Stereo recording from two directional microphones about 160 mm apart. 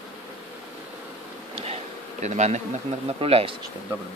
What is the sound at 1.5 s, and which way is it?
Bee, 40° right (ahead or behind).